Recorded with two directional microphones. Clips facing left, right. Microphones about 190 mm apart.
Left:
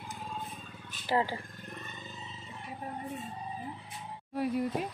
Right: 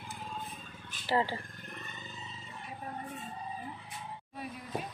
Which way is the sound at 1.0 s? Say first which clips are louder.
Left 1 dB; 15° left (ahead or behind).